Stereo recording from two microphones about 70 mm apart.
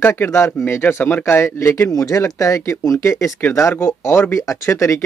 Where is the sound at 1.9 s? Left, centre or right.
Left.